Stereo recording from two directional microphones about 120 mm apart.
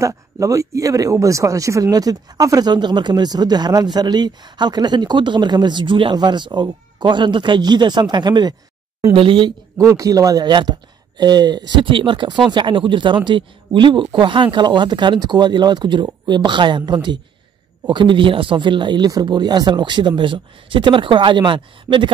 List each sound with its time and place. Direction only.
0.0 s speech: 25° right (ahead or behind); by 9.5 s 45° right (ahead or behind)
9.8 s speech: 25° right (ahead or behind)